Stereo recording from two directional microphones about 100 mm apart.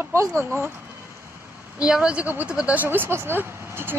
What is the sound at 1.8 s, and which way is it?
Speech, 10° right (ahead or behind).